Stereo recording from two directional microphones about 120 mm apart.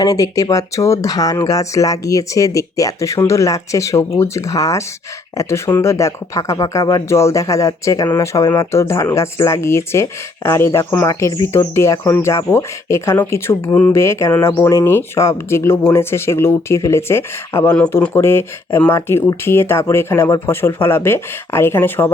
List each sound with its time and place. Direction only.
0.0 s speech: 30° left (ahead or behind)